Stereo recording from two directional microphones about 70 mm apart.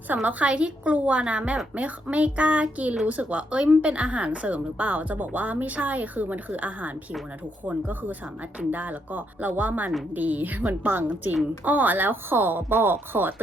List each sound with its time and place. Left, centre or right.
0.1 s a woman's voice: right